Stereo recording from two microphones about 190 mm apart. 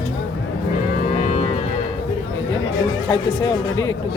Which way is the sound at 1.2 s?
40° left (ahead or behind).